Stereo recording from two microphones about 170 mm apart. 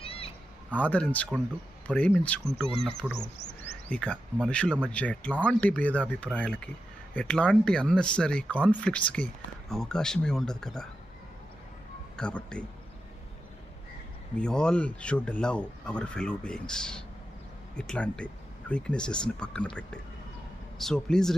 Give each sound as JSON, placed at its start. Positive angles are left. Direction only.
{"t": 0.0, "sound": "meow", "side_deg": 35}
{"t": 0.7, "sound": "speech", "side_deg": 10}
{"t": 12.1, "sound": "speech", "side_deg": 5}
{"t": 14.3, "sound": "speech", "side_deg": 5}
{"t": 20.7, "sound": "speech", "side_deg": 5}